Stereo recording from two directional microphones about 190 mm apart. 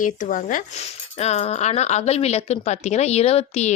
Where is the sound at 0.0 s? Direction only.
45° left (ahead or behind).